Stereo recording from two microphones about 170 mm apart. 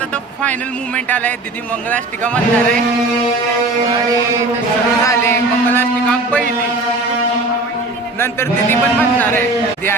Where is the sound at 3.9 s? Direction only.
20° right (ahead or behind).